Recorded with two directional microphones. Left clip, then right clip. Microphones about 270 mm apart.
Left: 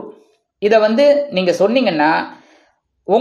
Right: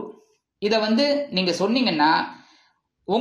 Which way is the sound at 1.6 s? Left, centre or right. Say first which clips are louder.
Left 6 dB; centre.